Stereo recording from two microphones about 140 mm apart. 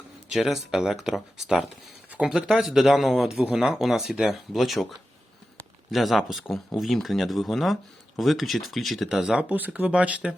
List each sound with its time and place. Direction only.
0.3 s speech: centre (ahead or behind)
5.9 s speech: centre (ahead or behind)